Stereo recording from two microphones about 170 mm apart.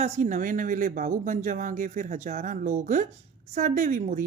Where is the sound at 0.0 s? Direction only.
45° right (ahead or behind).